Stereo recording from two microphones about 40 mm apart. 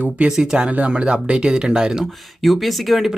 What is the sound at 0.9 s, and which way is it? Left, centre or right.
Speech, right.